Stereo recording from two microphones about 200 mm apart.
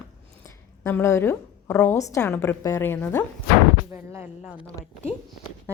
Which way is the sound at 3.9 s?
10° right (ahead or behind).